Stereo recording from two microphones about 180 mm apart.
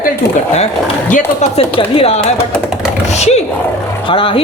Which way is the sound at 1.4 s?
30° left (ahead or behind).